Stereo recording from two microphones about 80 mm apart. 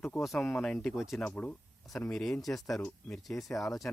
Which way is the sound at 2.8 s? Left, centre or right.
Centre.